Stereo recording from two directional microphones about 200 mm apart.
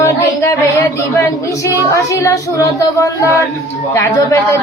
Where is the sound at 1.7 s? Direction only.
15° left (ahead or behind).